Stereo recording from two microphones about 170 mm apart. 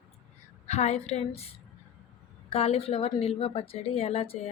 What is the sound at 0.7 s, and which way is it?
Speech, 40° left (ahead or behind).